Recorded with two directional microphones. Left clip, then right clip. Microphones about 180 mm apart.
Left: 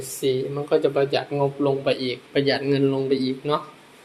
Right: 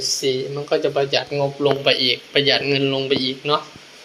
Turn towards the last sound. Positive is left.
turn(degrees=15)  # may be behind; listen again after turning